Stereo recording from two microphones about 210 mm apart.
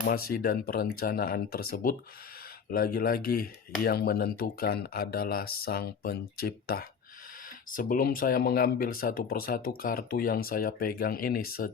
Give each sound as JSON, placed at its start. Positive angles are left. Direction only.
{"t": 0.0, "sound": "speech", "side_deg": 45}